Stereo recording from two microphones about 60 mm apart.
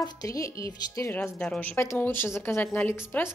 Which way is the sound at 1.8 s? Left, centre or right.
Left.